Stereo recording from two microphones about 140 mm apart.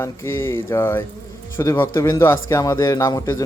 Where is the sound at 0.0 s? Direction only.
15° left (ahead or behind).